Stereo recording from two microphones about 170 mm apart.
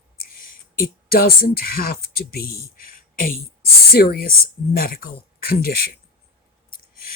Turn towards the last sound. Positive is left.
turn(degrees=60)  # may be behind; listen again after turning